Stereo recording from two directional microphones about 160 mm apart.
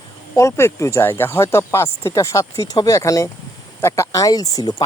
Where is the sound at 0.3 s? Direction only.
15° left (ahead or behind).